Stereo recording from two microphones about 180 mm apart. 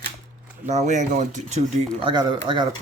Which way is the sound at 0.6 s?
40° right (ahead or behind).